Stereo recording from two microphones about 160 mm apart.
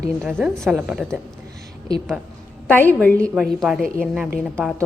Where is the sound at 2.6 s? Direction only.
10° left (ahead or behind).